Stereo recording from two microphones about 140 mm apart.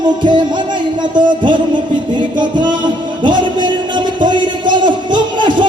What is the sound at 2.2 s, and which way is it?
Music, 35° right (ahead or behind).